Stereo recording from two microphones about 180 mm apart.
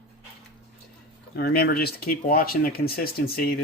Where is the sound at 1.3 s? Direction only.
55° left (ahead or behind).